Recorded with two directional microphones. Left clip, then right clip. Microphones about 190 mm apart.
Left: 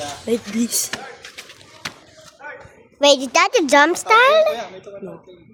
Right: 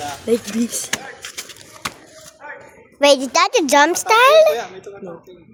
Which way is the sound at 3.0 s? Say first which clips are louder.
Right 1 dB; centre (ahead or behind).